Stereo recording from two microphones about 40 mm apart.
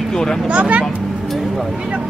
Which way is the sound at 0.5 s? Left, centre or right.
Right.